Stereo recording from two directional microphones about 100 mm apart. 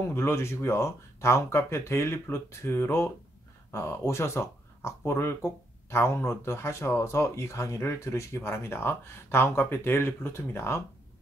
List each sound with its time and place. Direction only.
0.1 s speech: 25° left (ahead or behind)